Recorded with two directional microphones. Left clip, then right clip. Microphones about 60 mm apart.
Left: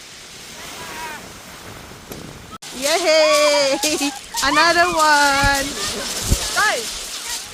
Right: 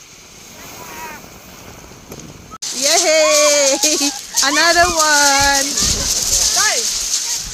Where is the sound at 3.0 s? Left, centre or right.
Right.